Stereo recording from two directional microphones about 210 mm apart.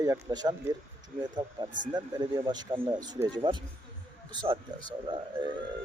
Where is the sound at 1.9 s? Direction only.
20° right (ahead or behind).